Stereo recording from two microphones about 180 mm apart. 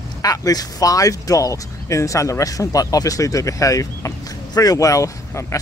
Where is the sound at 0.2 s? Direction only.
20° left (ahead or behind).